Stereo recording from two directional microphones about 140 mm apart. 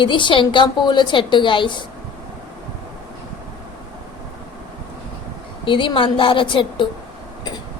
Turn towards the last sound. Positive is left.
turn(degrees=35)  # may be behind; listen again after turning